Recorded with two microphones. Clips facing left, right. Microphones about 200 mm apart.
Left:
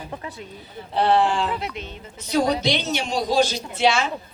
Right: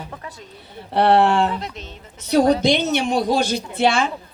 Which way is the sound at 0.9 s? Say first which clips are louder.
Right 4 dB; 65° right (ahead or behind).